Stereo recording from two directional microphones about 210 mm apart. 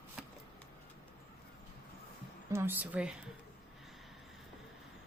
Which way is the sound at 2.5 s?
10° right (ahead or behind).